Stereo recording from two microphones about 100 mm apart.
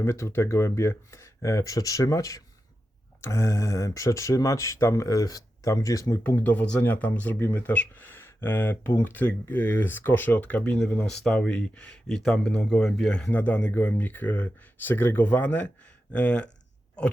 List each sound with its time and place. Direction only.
0.0 s speech: 30° left (ahead or behind)
6.2 s speech: 20° left (ahead or behind)